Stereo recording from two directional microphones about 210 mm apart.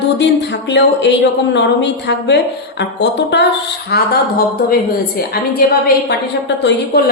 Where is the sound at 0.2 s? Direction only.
55° left (ahead or behind).